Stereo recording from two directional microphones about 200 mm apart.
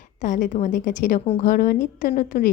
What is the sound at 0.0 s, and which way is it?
A woman's voice, 40° left (ahead or behind).